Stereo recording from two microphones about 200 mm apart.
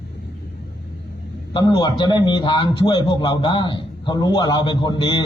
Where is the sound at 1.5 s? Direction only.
20° left (ahead or behind).